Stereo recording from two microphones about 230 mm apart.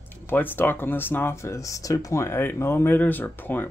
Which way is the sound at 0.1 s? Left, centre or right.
Centre.